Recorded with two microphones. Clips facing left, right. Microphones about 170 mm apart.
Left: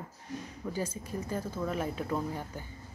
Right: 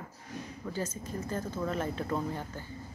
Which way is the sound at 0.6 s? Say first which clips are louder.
Left 1 dB; 10° left (ahead or behind).